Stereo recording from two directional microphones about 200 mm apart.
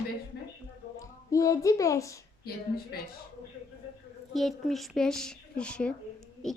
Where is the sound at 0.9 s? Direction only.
15° left (ahead or behind).